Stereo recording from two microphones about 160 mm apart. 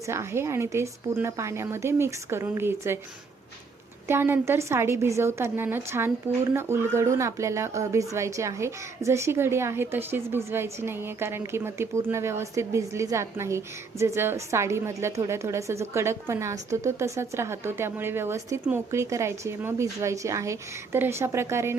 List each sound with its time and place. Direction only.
0.1 s speech: 15° right (ahead or behind)
4.1 s speech: 15° right (ahead or behind)